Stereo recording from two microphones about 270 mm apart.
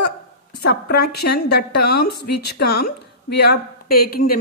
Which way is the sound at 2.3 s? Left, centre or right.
Left.